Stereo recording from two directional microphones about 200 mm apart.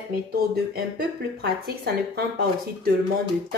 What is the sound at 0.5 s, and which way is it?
Speech, 50° right (ahead or behind).